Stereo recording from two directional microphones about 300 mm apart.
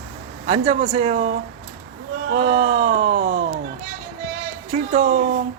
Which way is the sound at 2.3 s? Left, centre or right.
Centre.